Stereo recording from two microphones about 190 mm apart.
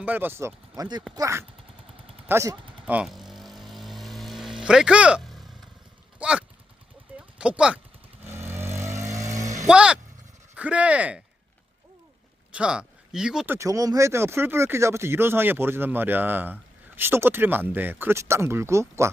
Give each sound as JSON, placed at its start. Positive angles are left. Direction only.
{"t": 0.0, "sound": "speech", "side_deg": -10}
{"t": 2.2, "sound": "vehicle", "side_deg": -15}
{"t": 6.1, "sound": "a sound", "side_deg": -5}
{"t": 7.3, "sound": "speech", "side_deg": -5}
{"t": 8.4, "sound": "vehicle", "side_deg": -10}
{"t": 8.9, "sound": "vehicle", "side_deg": -40}
{"t": 9.6, "sound": "speech", "side_deg": -5}
{"t": 12.5, "sound": "speech", "side_deg": -5}